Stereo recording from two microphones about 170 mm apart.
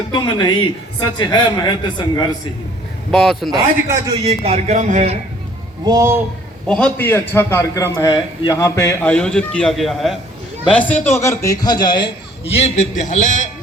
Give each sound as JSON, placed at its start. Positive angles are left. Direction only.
{"t": 0.1, "sound": "a man's voice", "side_deg": 25}
{"t": 3.1, "sound": "speech", "side_deg": 0}
{"t": 4.1, "sound": "speech", "side_deg": -35}
{"t": 5.8, "sound": "speech", "side_deg": -20}
{"t": 6.7, "sound": "a man's voice", "side_deg": 5}